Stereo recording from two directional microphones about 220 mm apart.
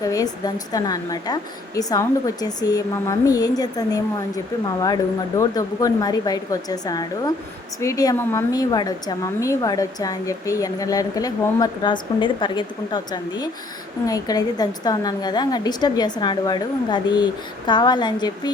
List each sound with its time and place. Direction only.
0.0 s a woman's voice: 15° left (ahead or behind)